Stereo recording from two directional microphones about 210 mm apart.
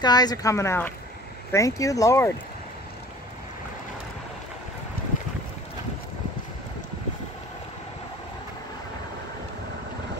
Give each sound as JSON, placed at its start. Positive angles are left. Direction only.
{"t": 0.0, "sound": "speech", "side_deg": 20}
{"t": 5.1, "sound": "boat", "side_deg": 40}